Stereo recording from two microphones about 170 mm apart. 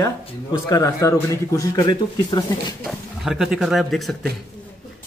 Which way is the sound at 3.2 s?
5° right (ahead or behind).